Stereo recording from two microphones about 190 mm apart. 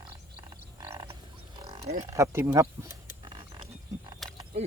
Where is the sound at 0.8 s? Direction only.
20° right (ahead or behind).